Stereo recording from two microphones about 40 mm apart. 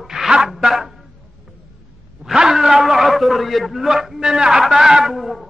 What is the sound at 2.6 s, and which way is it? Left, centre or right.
A man's voice, centre.